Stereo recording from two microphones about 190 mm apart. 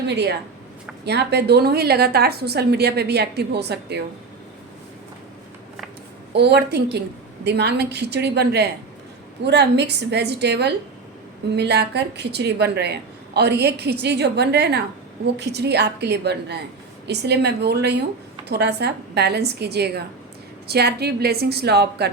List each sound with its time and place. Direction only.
0.1 s a woman's voice: 60° right (ahead or behind)
6.3 s a woman's voice: 60° right (ahead or behind)